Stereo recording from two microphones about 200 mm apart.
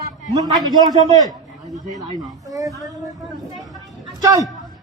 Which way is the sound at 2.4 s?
15° right (ahead or behind).